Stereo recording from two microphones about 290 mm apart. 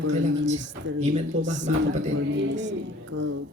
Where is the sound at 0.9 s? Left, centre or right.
Right.